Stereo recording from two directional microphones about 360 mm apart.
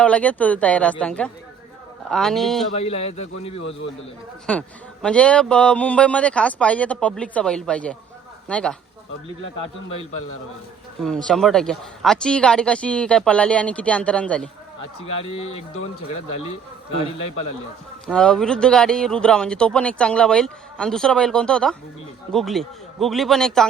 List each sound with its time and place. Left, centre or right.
0.0 s speech: centre
2.7 s a man's voice: centre
4.5 s speech: centre
11.0 s speech: centre
15.3 s speech: left
18.0 s speech: centre